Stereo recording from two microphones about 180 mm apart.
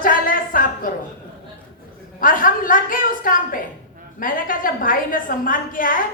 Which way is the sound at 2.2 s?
50° left (ahead or behind).